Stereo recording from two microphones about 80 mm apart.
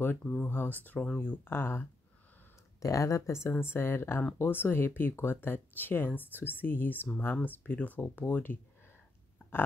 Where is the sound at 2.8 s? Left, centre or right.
Left.